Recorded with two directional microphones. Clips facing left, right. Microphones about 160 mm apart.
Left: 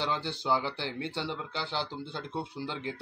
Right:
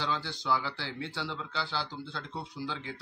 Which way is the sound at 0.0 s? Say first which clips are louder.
Left 2 dB; 20° left (ahead or behind).